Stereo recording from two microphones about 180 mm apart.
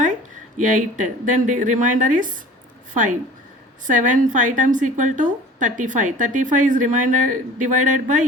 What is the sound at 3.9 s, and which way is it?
A woman's voice, 45° right (ahead or behind).